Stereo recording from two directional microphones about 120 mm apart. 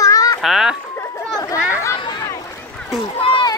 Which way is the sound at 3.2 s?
45° left (ahead or behind).